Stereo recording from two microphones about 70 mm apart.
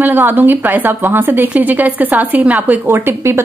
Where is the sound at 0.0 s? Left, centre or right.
Right.